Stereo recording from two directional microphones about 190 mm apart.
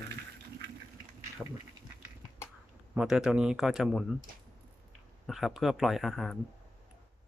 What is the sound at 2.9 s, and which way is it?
Speech, 5° right (ahead or behind).